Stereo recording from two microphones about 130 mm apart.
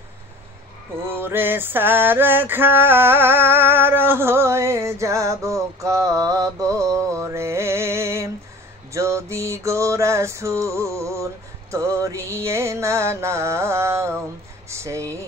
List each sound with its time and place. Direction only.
1.0 s music: 15° right (ahead or behind)
14.7 s speech: 20° right (ahead or behind)